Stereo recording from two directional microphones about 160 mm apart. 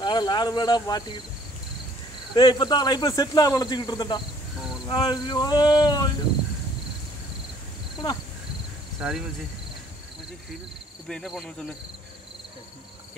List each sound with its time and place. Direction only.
0.0 s speech: 30° left (ahead or behind)
2.3 s speech: 30° left (ahead or behind)
9.0 s speech: 5° right (ahead or behind)
11.1 s speech: centre (ahead or behind)